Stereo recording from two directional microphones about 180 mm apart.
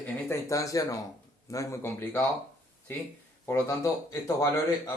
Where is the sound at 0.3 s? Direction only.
15° left (ahead or behind).